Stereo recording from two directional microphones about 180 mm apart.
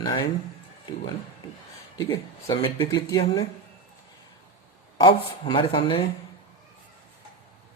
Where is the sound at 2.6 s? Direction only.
25° left (ahead or behind).